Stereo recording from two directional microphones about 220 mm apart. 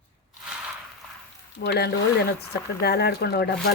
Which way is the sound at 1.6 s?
45° left (ahead or behind).